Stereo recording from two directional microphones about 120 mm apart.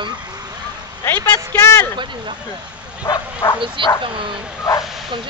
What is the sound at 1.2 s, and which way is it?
Speech, 20° left (ahead or behind).